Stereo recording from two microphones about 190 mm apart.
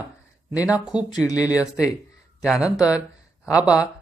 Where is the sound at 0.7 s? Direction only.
5° right (ahead or behind).